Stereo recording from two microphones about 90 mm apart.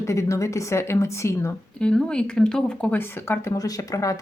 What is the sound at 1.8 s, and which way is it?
Speech, 10° left (ahead or behind).